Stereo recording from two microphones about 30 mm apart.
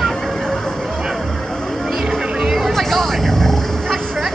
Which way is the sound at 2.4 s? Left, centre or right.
Centre.